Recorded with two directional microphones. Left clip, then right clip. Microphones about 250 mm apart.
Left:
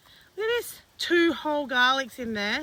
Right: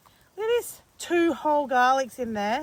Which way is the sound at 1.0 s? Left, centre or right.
Centre.